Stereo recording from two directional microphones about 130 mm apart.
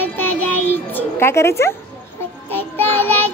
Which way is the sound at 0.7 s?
15° left (ahead or behind).